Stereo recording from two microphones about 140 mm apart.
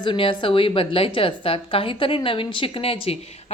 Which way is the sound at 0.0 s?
35° left (ahead or behind).